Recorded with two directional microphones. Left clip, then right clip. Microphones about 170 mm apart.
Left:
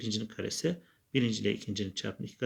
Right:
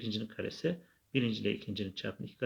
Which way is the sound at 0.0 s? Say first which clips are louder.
Left 2 dB; 40° left (ahead or behind).